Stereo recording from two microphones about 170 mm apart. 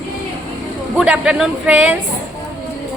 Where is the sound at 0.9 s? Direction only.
5° right (ahead or behind).